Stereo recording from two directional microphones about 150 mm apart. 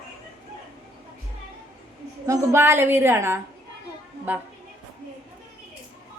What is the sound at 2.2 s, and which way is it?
A woman's voice, 20° right (ahead or behind).